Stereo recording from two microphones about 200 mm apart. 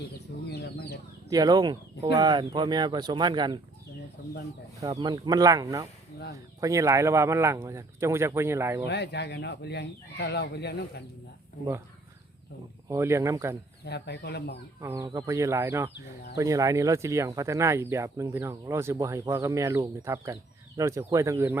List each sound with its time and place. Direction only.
0.4 s speech: 55° left (ahead or behind)
1.3 s speech: 20° right (ahead or behind)
4.2 s speech: 45° left (ahead or behind)
4.8 s speech: 20° right (ahead or behind)
8.9 s speech: 55° left (ahead or behind)
12.9 s speech: 15° right (ahead or behind)
13.8 s speech: 55° left (ahead or behind)
14.8 s speech: 15° right (ahead or behind)